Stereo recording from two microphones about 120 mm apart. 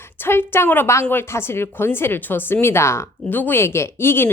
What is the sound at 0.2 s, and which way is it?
Speech, 20° left (ahead or behind).